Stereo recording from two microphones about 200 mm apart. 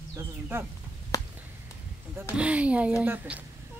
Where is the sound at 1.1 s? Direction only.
15° left (ahead or behind).